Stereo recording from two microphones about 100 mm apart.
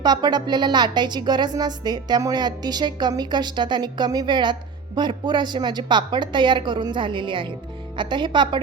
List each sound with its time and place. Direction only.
0.0 s speech: 45° right (ahead or behind)